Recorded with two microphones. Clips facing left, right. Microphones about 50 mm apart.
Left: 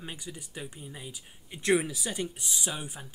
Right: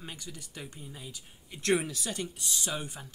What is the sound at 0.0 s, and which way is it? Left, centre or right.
Speech, centre.